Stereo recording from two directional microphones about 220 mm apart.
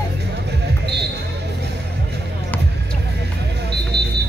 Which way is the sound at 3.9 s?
50° right (ahead or behind).